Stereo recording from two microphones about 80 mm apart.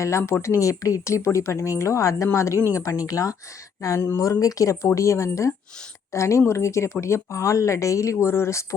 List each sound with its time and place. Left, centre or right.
0.0 s speech: left